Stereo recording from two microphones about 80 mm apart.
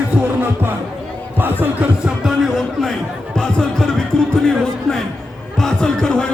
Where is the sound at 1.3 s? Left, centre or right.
Right.